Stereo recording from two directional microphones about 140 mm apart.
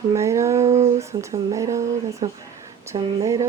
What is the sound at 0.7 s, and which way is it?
Speech, 50° right (ahead or behind).